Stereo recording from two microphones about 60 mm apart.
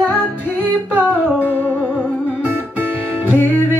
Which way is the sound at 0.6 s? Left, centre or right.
Right.